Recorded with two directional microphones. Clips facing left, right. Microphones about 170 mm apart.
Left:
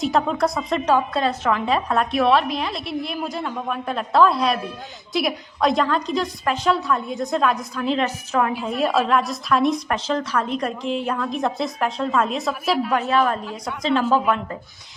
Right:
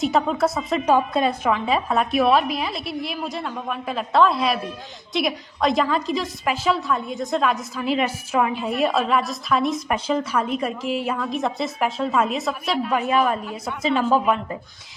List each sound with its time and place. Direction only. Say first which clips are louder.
0.0 s a woman's voice: even; centre (ahead or behind)
0.9 s a woman's voice: right 1 dB; 15° right (ahead or behind)